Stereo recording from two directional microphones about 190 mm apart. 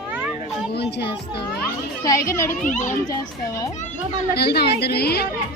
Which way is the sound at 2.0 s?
15° left (ahead or behind).